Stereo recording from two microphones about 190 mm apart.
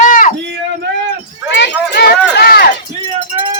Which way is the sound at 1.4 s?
70° left (ahead or behind).